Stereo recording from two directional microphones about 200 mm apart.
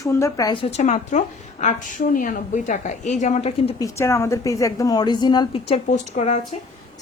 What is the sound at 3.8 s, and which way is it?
A woman's voice, 15° left (ahead or behind).